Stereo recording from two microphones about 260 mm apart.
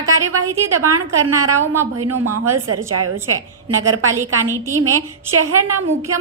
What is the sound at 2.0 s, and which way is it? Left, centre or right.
A woman's voice, right.